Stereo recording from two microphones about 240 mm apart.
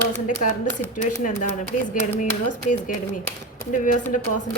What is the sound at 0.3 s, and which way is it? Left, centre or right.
Speech, left.